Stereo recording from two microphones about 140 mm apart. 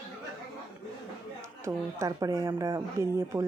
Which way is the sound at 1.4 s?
20° right (ahead or behind).